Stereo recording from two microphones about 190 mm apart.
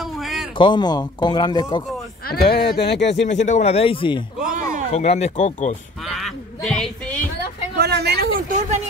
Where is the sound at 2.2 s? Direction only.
55° left (ahead or behind).